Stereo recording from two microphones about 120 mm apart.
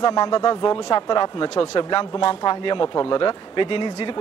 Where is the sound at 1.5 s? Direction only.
50° left (ahead or behind).